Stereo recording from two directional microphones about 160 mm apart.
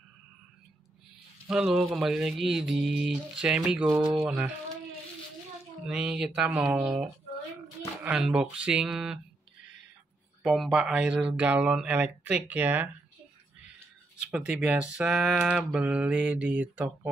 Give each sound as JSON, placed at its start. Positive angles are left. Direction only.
{"t": 1.5, "sound": "speech", "side_deg": -5}
{"t": 5.9, "sound": "speech", "side_deg": -5}
{"t": 10.4, "sound": "speech", "side_deg": 0}
{"t": 14.3, "sound": "speech", "side_deg": -5}